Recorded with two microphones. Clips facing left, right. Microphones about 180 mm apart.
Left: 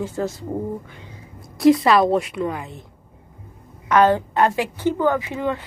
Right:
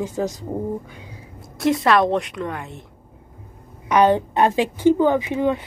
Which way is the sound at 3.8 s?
20° right (ahead or behind).